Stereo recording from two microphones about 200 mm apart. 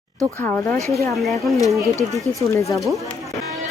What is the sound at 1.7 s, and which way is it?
Speech, 15° right (ahead or behind).